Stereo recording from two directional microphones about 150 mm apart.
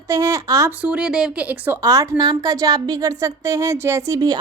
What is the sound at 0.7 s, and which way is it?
A woman's voice, 10° right (ahead or behind).